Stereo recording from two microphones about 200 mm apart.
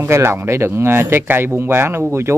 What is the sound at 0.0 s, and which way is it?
Speech, 10° right (ahead or behind).